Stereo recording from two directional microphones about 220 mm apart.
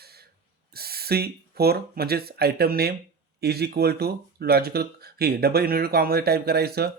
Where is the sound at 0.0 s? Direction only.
45° right (ahead or behind).